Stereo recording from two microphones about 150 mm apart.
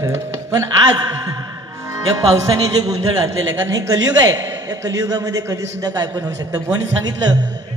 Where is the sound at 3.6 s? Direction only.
20° right (ahead or behind).